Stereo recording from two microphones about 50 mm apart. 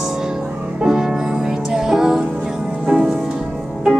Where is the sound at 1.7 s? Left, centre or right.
Centre.